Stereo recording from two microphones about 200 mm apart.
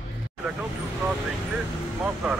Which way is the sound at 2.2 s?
5° right (ahead or behind).